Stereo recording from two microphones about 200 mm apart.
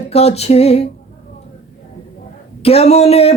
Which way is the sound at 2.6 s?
30° left (ahead or behind).